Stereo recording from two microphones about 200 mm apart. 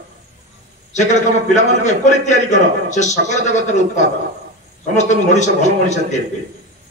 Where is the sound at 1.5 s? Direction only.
35° left (ahead or behind).